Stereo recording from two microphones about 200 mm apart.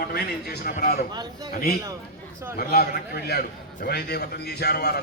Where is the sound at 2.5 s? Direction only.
50° left (ahead or behind).